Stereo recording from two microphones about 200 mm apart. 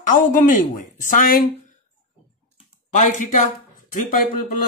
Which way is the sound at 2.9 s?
40° left (ahead or behind).